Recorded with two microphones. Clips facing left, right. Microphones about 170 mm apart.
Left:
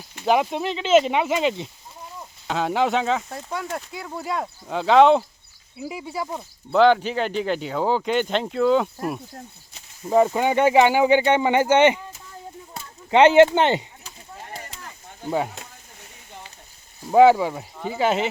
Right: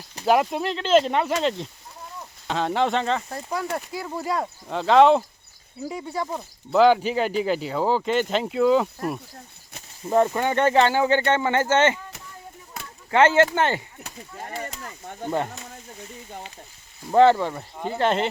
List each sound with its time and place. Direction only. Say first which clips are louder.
0.3 s speech: even; centre (ahead or behind); by 13.8 s 20° left (ahead or behind)
14.6 s a sound: right 6 dB; 45° right (ahead or behind)
17.1 s speech: left 2 dB; 10° left (ahead or behind)